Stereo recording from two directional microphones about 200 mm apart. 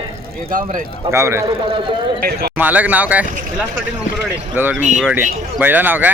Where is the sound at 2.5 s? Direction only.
10° right (ahead or behind).